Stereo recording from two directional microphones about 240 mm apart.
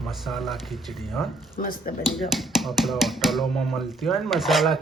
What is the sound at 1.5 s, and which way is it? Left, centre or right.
Speech, left.